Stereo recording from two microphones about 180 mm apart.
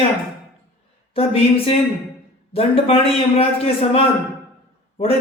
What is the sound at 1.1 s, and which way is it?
A man's voice, 30° left (ahead or behind).